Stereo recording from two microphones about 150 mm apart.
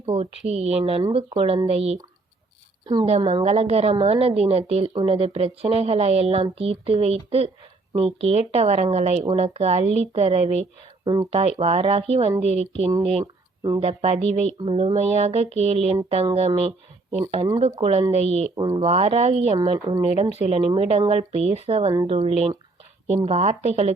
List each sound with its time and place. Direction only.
0.0 s a woman's voice: 40° right (ahead or behind)
2.8 s a woman's voice: 30° right (ahead or behind)
13.6 s speech: 30° right (ahead or behind)
13.8 s a woman's voice: 45° right (ahead or behind)
18.5 s a woman's voice: 30° right (ahead or behind)
18.9 s speech: 45° right (ahead or behind)
19.5 s a woman's voice: 35° right (ahead or behind)